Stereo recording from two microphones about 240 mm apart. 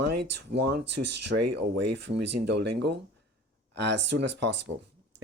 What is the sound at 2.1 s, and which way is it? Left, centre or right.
Speech, right.